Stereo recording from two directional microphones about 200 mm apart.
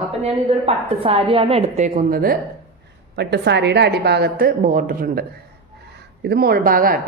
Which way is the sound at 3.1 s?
55° right (ahead or behind).